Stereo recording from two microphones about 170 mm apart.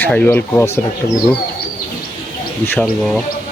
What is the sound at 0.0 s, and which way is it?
Speech, 5° left (ahead or behind).